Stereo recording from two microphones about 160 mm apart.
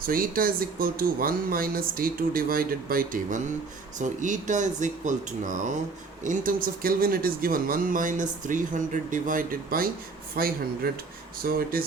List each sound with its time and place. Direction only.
0.0 s speech: 65° right (ahead or behind)